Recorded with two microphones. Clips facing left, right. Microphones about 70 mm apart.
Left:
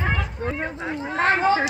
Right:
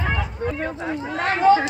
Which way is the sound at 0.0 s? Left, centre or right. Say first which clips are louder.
Right 1 dB; left.